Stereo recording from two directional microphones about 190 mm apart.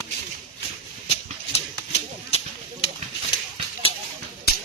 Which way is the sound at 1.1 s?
35° left (ahead or behind).